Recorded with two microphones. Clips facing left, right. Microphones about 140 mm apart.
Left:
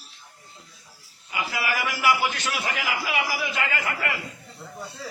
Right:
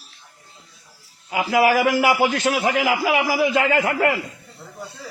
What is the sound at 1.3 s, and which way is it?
A man's voice, 90° right.